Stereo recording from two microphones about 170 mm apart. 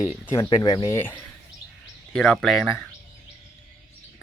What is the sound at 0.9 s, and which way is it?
Speech, 10° left (ahead or behind).